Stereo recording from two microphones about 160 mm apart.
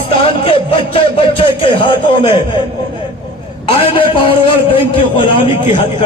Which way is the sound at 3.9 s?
35° left (ahead or behind).